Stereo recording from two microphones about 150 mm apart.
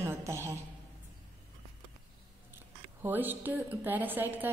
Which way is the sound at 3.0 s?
15° right (ahead or behind).